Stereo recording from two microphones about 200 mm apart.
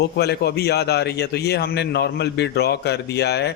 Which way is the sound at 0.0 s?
55° left (ahead or behind).